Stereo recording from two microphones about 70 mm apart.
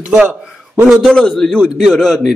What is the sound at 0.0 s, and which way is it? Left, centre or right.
Speech, centre.